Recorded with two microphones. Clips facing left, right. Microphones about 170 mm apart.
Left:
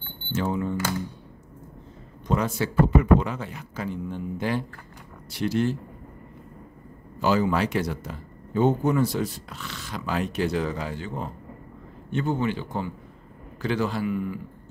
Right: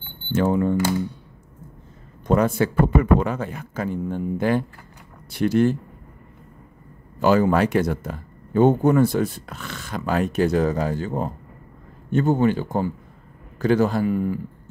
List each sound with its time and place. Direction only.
0.3 s speech: 55° right (ahead or behind)
2.2 s speech: 55° right (ahead or behind)
7.2 s speech: 55° right (ahead or behind)